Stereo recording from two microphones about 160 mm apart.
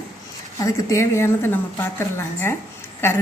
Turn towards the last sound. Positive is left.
turn(degrees=15)  # may be behind; listen again after turning